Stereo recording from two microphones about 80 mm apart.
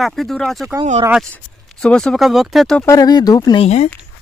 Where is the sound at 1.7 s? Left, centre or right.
Centre.